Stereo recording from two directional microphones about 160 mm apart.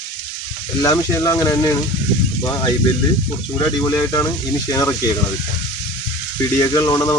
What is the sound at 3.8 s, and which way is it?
Speech, 20° left (ahead or behind).